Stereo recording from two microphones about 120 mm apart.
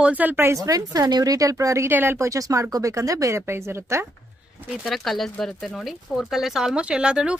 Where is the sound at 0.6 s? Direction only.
30° right (ahead or behind).